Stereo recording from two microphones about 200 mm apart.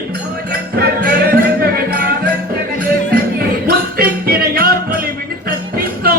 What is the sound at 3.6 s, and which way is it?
Music, 50° right (ahead or behind).